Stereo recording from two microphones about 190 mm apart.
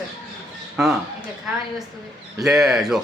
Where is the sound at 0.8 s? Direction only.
5° right (ahead or behind).